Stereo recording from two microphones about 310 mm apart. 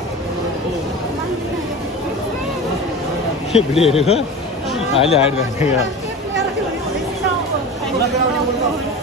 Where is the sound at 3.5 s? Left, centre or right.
Centre.